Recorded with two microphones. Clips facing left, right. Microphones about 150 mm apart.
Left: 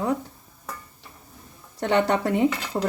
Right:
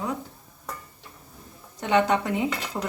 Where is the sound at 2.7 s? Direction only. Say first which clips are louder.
Left 5 dB; 20° left (ahead or behind).